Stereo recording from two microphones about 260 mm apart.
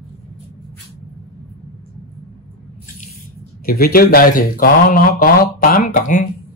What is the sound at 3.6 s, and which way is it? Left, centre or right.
Speech, left.